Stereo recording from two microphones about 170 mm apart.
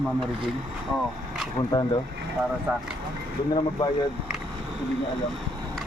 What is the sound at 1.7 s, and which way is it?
Speech, 25° left (ahead or behind).